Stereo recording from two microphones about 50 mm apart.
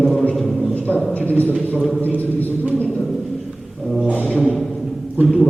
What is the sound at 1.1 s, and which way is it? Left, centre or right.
A man's voice, left.